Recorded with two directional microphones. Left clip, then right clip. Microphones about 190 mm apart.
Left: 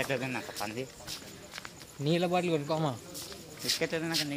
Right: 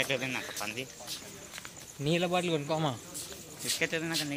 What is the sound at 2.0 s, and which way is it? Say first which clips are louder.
Speech: even; 10° left (ahead or behind).